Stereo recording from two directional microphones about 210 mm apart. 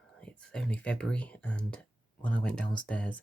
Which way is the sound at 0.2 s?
5° left (ahead or behind).